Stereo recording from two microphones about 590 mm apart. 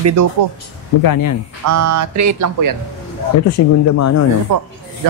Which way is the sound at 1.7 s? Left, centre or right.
Right.